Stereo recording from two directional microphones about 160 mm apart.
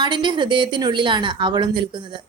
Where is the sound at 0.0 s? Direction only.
30° right (ahead or behind).